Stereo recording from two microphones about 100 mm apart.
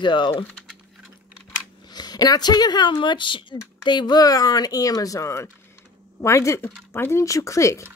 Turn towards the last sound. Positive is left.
turn(degrees=30)  # may be behind; listen again after turning